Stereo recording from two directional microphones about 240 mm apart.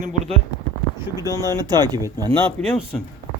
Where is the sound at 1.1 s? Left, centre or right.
Centre.